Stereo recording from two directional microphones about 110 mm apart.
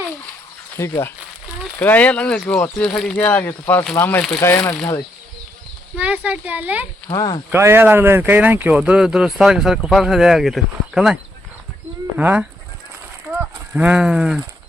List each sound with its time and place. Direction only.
0.8 s speech: 25° left (ahead or behind)
1.8 s speech: 15° left (ahead or behind)
6.0 s speech: 10° right (ahead or behind)
7.1 s speech: 35° left (ahead or behind)
7.5 s speech: 20° right (ahead or behind)
13.7 s speech: 10° right (ahead or behind)